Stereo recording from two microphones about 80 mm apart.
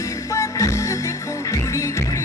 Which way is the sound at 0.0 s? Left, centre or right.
Left.